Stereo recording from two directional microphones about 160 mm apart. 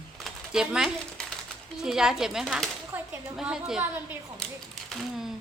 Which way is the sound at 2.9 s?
10° right (ahead or behind).